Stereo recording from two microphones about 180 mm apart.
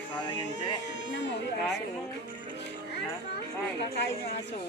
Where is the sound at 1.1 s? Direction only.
80° left.